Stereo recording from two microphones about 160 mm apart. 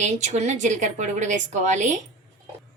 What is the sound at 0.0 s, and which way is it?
A woman's voice, 45° right (ahead or behind).